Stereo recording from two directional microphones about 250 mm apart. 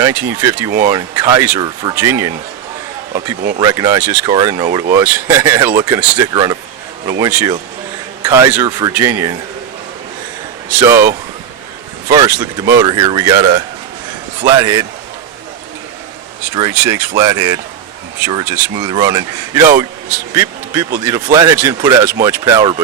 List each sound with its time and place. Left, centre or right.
0.0 s speech: centre
3.6 s speech: centre
10.7 s speech: centre
16.6 s speech: centre